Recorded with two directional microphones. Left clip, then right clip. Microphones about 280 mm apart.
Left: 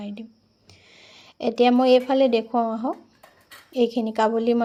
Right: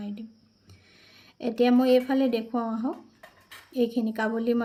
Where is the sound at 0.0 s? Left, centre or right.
Left.